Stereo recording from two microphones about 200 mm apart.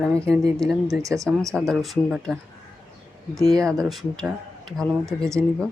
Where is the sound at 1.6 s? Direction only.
Centre (ahead or behind).